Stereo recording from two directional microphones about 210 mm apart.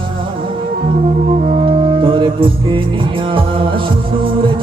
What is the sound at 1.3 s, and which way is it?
Music, 30° right (ahead or behind).